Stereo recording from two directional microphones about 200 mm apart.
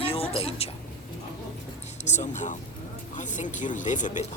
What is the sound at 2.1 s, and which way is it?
Speech, 35° left (ahead or behind).